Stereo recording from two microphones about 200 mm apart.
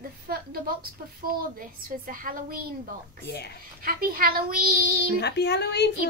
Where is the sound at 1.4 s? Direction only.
45° right (ahead or behind).